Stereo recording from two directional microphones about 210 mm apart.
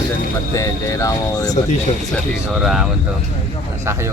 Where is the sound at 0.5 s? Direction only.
15° left (ahead or behind).